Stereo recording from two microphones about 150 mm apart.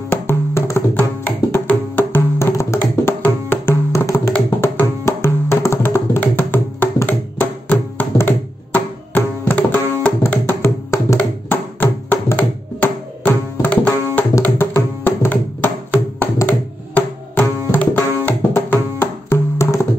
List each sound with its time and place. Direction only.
0.1 s music: 15° left (ahead or behind)